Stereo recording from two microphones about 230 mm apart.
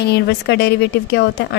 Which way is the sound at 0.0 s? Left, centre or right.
Left.